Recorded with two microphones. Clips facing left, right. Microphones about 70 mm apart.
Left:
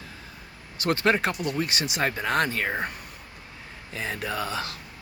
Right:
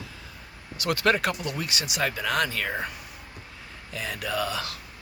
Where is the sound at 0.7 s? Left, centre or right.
Left.